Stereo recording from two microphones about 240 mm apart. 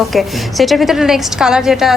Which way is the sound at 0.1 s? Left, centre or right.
Centre.